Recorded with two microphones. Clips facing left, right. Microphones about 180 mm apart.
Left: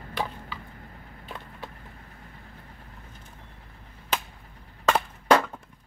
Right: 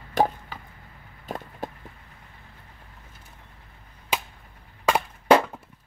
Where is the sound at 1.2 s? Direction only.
45° right (ahead or behind).